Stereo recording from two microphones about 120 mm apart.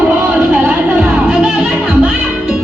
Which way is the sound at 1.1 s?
10° right (ahead or behind).